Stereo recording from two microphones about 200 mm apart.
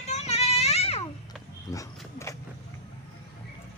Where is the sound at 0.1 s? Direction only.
30° left (ahead or behind).